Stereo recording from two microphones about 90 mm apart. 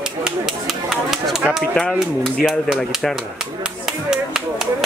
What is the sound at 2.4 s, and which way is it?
Speech, 5° right (ahead or behind).